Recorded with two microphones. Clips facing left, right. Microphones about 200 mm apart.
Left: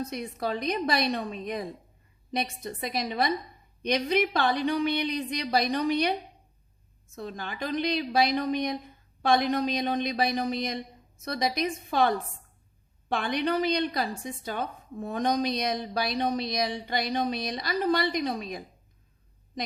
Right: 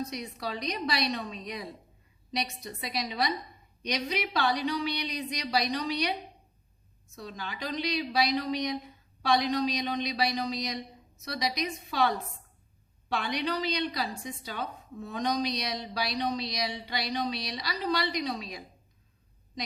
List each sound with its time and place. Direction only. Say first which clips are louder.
0.0 s a woman's voice: left 4 dB; 50° left (ahead or behind)
7.2 s a woman's voice: left 4 dB; 50° left (ahead or behind)